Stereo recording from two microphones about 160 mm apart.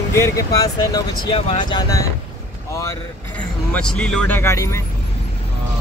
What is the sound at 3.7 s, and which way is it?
Speech, 5° left (ahead or behind).